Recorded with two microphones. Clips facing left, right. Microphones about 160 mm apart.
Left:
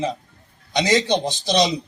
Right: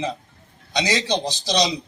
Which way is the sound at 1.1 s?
20° left (ahead or behind).